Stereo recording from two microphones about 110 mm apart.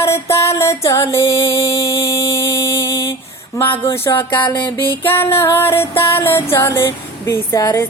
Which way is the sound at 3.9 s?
20° left (ahead or behind).